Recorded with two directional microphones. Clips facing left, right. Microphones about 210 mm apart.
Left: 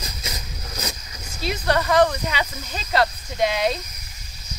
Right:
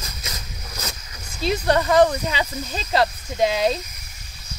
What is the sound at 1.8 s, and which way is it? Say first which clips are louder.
Speech: right 1 dB; 15° right (ahead or behind).